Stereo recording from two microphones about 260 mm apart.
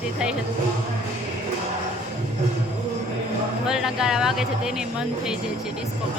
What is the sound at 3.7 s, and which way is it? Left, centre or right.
A woman's voice, centre.